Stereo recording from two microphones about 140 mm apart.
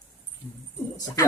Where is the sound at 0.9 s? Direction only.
25° left (ahead or behind).